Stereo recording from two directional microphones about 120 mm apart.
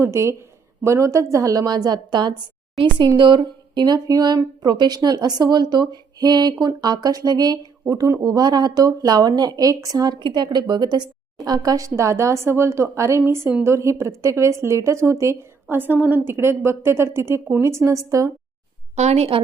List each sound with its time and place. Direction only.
0.0 s speech: 25° right (ahead or behind)
18.9 s a woman's voice: 65° right (ahead or behind)